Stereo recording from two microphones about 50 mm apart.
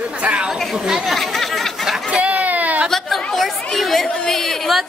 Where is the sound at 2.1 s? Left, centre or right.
Right.